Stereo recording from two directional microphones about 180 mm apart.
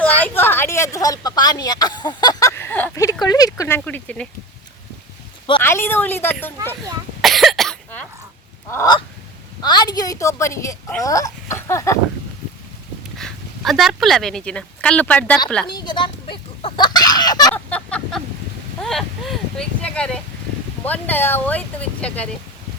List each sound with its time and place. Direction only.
0.0 s a woman's voice: 10° left (ahead or behind)
5.5 s speech: 15° left (ahead or behind)
7.2 s cough: centre (ahead or behind)
8.7 s a woman's voice: 20° left (ahead or behind)
13.1 s speech: centre (ahead or behind)
15.6 s fowl: 25° left (ahead or behind)
17.5 s a sound: 5° left (ahead or behind)
20.8 s speech: 10° left (ahead or behind)